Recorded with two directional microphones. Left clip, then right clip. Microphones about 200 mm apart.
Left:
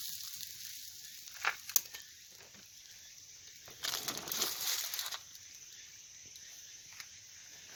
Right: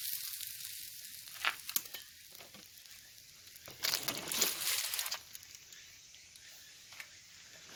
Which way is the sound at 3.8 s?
20° right (ahead or behind).